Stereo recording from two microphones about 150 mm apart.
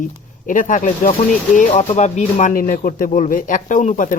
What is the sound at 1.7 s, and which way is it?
Speech, 45° left (ahead or behind).